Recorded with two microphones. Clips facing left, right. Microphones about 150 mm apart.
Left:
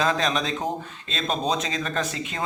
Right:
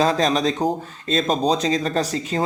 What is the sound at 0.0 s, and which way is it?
Speech, 35° right (ahead or behind).